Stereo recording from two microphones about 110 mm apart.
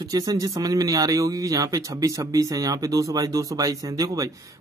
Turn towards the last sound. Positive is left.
turn(degrees=-30)  # may be behind; listen again after turning